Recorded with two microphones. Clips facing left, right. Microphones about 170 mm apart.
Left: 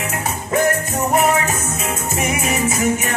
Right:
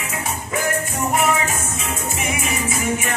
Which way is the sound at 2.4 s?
45° left (ahead or behind).